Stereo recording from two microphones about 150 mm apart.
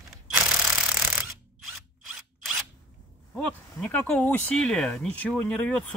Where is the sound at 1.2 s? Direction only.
5° right (ahead or behind).